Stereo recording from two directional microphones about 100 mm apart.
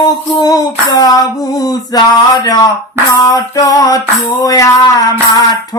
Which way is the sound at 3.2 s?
40° left (ahead or behind).